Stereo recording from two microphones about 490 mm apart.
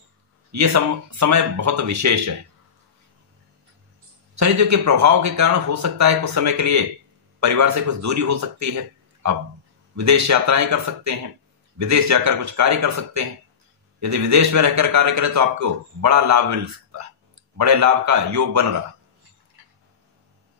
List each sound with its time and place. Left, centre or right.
0.5 s a man's voice: right
4.4 s a man's voice: right